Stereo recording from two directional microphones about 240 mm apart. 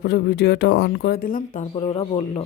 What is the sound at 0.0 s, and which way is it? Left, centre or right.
A man's voice, left.